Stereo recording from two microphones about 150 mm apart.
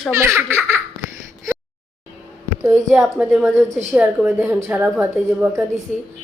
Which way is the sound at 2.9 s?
5° right (ahead or behind).